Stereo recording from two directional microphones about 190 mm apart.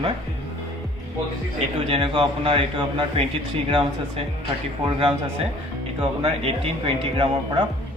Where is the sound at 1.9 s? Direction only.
25° right (ahead or behind).